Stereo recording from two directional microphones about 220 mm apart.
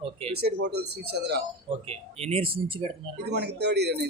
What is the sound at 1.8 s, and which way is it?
Speech, 25° right (ahead or behind).